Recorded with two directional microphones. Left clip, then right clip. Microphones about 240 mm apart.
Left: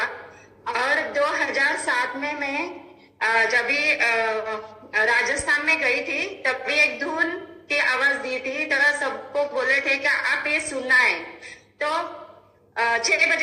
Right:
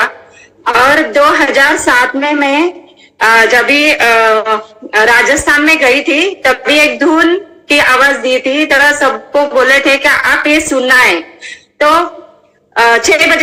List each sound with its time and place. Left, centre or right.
0.7 s speech: right